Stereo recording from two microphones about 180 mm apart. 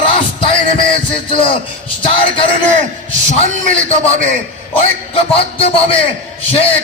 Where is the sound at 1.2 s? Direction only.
30° left (ahead or behind).